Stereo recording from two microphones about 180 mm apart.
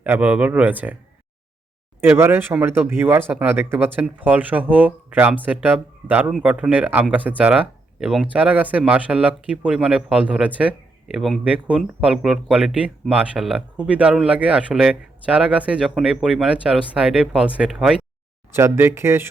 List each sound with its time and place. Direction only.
0.0 s speech: 10° right (ahead or behind)
2.0 s speech: 15° right (ahead or behind)
18.5 s speech: 15° right (ahead or behind)